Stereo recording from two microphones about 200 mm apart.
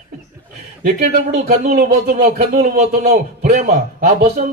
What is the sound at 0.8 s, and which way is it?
A man's voice, 35° right (ahead or behind).